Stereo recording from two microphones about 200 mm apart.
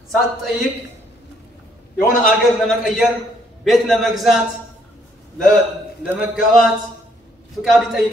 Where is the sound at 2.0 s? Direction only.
45° left (ahead or behind).